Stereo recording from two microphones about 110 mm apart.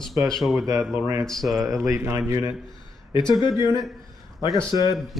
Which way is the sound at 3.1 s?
45° left (ahead or behind).